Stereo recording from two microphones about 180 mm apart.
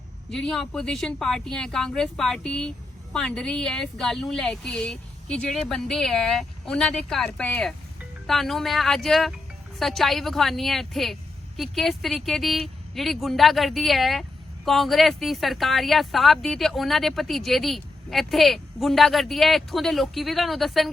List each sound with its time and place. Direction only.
0.3 s a woman's voice: 5° left (ahead or behind)